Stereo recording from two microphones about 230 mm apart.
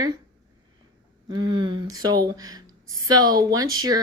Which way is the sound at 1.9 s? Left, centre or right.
Centre.